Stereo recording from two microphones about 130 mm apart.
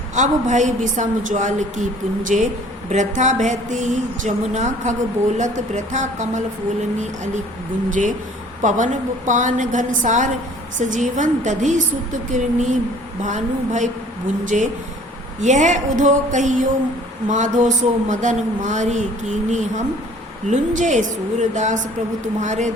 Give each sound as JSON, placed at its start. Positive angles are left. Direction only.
{"t": 0.1, "sound": "speech", "side_deg": -70}
{"t": 7.9, "sound": "speech", "side_deg": -85}
{"t": 8.6, "sound": "speech", "side_deg": -75}